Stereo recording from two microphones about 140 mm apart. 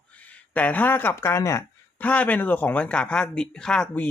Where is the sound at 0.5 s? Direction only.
10° left (ahead or behind).